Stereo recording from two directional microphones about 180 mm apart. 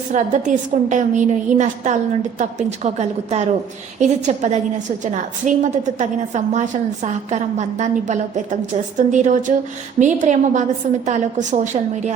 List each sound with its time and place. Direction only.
0.1 s a woman's voice: 45° right (ahead or behind)